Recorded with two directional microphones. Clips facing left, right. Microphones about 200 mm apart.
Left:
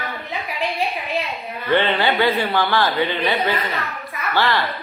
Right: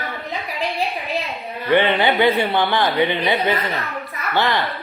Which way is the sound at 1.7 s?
15° right (ahead or behind).